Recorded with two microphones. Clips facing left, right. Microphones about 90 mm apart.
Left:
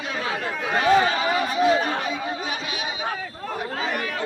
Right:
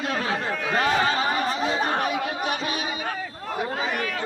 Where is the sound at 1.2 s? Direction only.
35° right (ahead or behind).